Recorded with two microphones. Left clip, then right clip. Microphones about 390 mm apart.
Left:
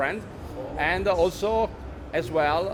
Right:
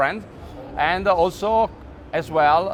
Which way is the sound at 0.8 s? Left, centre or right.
Right.